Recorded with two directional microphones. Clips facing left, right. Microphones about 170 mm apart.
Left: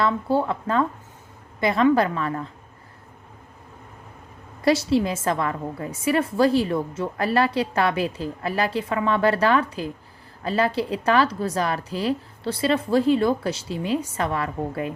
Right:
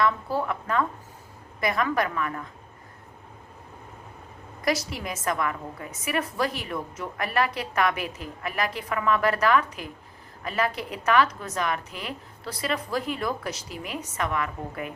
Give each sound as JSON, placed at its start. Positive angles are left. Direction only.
{"t": 0.0, "sound": "a woman's voice", "side_deg": 30}
{"t": 4.6, "sound": "a woman's voice", "side_deg": 30}